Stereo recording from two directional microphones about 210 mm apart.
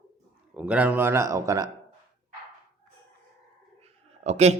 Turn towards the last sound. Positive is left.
turn(degrees=-30)  # may be behind; listen again after turning